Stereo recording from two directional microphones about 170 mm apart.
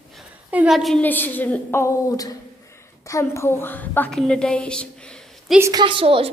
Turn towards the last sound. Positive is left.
turn(degrees=-35)  # may be behind; listen again after turning